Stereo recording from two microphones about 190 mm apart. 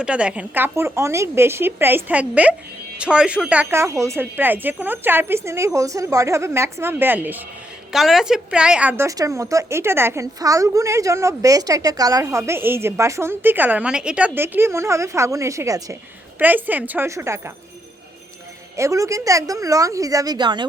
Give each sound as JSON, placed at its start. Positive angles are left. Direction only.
{"t": 0.0, "sound": "speech", "side_deg": -5}
{"t": 18.8, "sound": "speech", "side_deg": -15}